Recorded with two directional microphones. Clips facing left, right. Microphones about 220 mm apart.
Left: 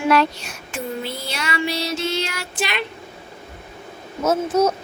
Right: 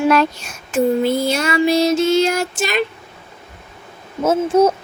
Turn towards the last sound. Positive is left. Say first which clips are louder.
# right 4 dB
turn(degrees=-30)  # may be behind; listen again after turning